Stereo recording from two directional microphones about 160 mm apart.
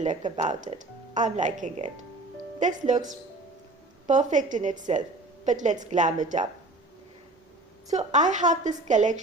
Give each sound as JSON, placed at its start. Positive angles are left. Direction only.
{"t": 0.3, "sound": "speech", "side_deg": -45}
{"t": 4.0, "sound": "speech", "side_deg": -50}
{"t": 7.9, "sound": "speech", "side_deg": -50}